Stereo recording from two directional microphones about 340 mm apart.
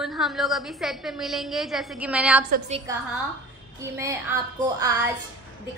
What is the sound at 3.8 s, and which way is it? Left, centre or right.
Child singing, centre.